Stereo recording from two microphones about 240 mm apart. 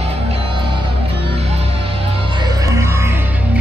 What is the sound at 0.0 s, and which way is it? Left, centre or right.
Music, right.